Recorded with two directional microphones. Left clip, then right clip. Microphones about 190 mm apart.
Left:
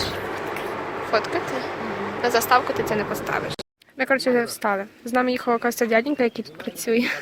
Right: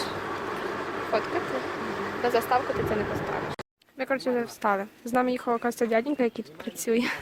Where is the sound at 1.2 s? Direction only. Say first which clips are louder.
Left 3 dB; 50° right (ahead or behind).